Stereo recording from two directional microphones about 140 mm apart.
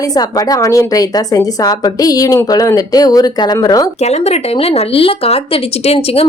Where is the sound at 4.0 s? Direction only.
50° left (ahead or behind).